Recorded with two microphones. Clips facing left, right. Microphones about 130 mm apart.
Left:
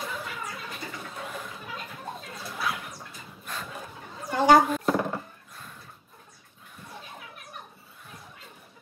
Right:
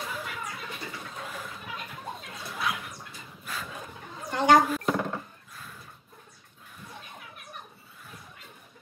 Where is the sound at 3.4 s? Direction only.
Centre (ahead or behind).